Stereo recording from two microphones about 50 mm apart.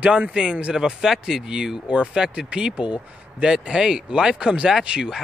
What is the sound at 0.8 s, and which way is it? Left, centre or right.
Speech, centre.